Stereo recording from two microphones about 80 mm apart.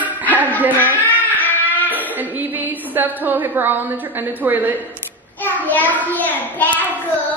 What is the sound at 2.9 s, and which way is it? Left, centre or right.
Speech, right.